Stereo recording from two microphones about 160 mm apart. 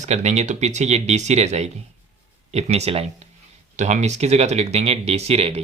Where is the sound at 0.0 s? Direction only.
45° right (ahead or behind).